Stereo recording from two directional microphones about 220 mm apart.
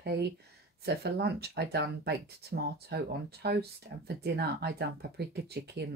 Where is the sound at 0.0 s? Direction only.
50° right (ahead or behind).